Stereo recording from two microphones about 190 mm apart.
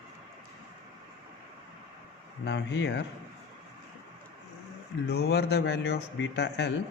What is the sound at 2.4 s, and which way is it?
Speech, 65° left (ahead or behind).